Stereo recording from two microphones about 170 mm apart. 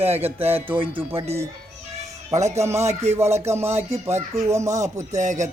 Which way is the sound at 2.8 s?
40° right (ahead or behind).